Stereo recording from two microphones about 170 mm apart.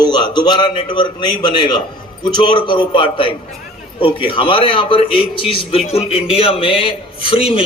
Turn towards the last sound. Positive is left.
turn(degrees=35)  # may be behind; listen again after turning